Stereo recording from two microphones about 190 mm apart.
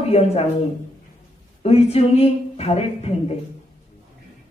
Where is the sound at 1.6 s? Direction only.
35° left (ahead or behind).